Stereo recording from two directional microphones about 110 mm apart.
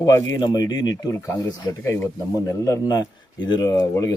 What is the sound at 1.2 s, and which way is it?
Speech, 20° left (ahead or behind).